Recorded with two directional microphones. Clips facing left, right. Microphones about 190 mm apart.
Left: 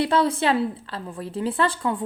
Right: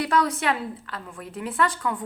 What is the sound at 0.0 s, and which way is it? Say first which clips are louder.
A woman's voice: left 3 dB; 25° left (ahead or behind).